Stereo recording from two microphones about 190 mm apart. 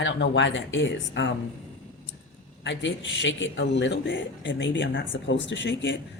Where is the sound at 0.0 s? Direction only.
75° left (ahead or behind).